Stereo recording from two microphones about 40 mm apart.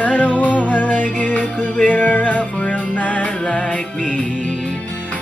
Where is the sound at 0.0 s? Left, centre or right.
Left.